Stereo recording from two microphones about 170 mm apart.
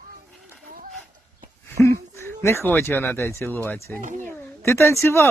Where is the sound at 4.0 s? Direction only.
45° right (ahead or behind).